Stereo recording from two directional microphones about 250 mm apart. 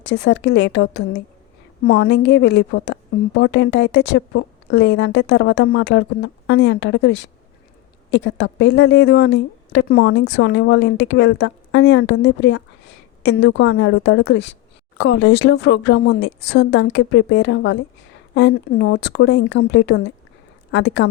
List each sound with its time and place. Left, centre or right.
0.3 s a woman's voice: left
8.1 s a woman's voice: left